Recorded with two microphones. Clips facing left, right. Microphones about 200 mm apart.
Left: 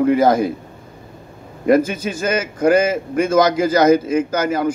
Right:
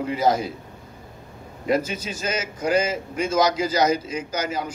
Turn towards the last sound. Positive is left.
turn(degrees=55)  # may be behind; listen again after turning